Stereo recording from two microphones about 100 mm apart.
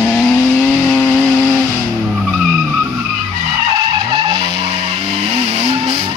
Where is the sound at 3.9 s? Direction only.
55° right (ahead or behind); by 5.3 s 70° right (ahead or behind).